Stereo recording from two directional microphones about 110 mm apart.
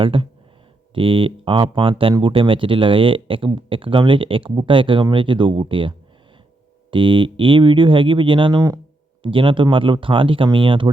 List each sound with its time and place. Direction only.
0.0 s speech: 50° right (ahead or behind)